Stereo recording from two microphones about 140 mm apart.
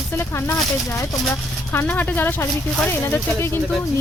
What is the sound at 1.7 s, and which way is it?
Speech, 15° left (ahead or behind).